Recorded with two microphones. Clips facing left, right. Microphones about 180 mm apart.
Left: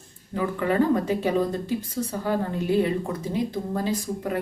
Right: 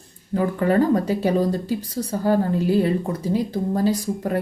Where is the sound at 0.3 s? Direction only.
40° right (ahead or behind).